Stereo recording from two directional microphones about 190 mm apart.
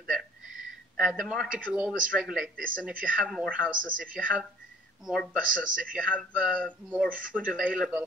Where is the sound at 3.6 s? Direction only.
45° right (ahead or behind).